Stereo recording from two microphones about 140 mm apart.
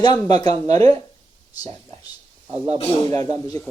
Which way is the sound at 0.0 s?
30° left (ahead or behind).